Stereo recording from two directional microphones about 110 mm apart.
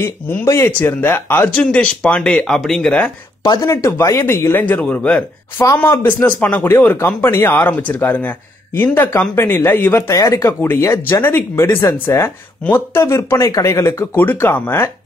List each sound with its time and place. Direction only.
0.0 s speech: 25° left (ahead or behind)
1.7 s speech: 10° left (ahead or behind)
3.4 s speech: 30° left (ahead or behind); by 5.2 s 10° left (ahead or behind)
5.6 s speech: 25° left (ahead or behind)
6.0 s speech: 15° left (ahead or behind)